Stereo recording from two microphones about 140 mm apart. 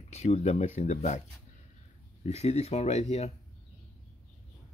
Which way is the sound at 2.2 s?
50° left (ahead or behind).